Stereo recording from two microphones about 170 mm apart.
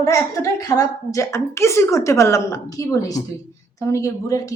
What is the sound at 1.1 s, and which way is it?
A woman's voice, 15° left (ahead or behind).